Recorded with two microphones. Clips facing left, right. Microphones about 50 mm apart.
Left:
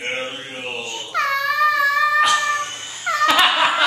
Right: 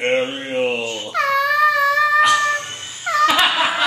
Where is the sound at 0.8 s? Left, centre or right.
Centre.